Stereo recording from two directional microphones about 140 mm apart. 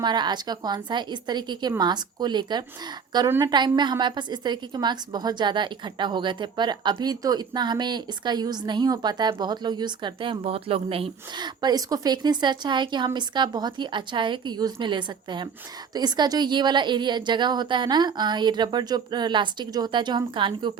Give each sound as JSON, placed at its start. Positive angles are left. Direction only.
{"t": 0.0, "sound": "a woman's voice", "side_deg": -30}